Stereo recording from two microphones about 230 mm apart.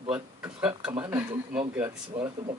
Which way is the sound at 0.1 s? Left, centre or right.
Centre.